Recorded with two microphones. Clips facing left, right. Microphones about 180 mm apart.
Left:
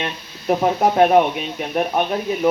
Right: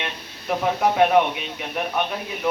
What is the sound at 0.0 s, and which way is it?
Speech, 45° left (ahead or behind).